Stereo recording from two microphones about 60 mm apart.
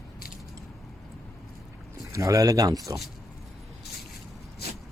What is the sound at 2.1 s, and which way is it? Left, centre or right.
Speech, right.